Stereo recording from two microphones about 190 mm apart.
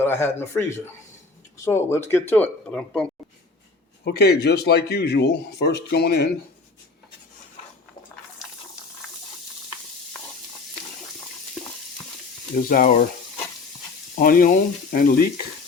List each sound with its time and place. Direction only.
0.0 s speech: 10° left (ahead or behind)
1.6 s speech: 15° left (ahead or behind)
4.0 s speech: 60° left (ahead or behind)
12.6 s speech: 45° left (ahead or behind)
14.2 s speech: 50° left (ahead or behind)